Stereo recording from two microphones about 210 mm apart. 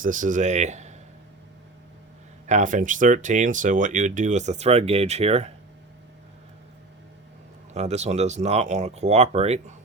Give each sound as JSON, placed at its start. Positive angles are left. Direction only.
{"t": 0.0, "sound": "speech", "side_deg": -40}
{"t": 2.5, "sound": "speech", "side_deg": -35}
{"t": 7.7, "sound": "speech", "side_deg": -30}